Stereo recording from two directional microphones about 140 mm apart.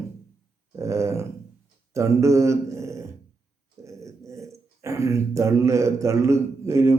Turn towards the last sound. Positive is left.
turn(degrees=-20)  # may be behind; listen again after turning